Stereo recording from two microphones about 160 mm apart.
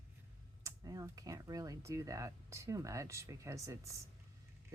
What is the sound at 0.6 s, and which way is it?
Speech, 20° right (ahead or behind).